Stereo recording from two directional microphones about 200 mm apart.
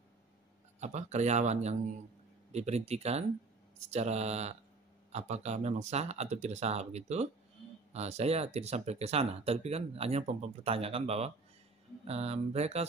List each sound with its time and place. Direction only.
0.7 s speech: 35° right (ahead or behind)